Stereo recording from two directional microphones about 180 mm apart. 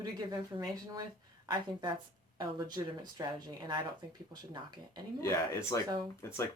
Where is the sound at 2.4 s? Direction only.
25° right (ahead or behind).